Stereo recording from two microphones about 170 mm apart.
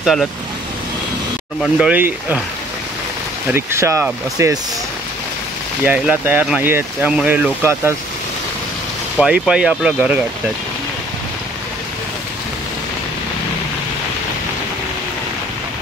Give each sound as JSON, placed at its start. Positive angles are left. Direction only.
{"t": 0.0, "sound": "speech", "side_deg": 0}
{"t": 1.6, "sound": "speech", "side_deg": -5}
{"t": 3.5, "sound": "speech", "side_deg": -15}
{"t": 5.9, "sound": "speech", "side_deg": -10}
{"t": 9.2, "sound": "speech", "side_deg": -5}